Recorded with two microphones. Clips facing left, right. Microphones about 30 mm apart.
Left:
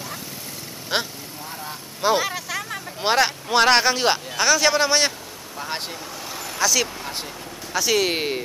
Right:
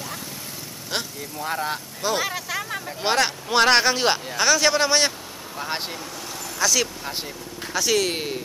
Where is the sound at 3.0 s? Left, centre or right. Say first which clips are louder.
Left 2 dB; centre.